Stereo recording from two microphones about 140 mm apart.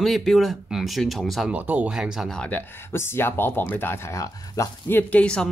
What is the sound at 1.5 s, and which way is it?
Speech, 10° right (ahead or behind).